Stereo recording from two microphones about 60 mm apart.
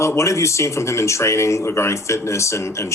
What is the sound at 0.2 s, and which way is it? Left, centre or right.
Speech, left.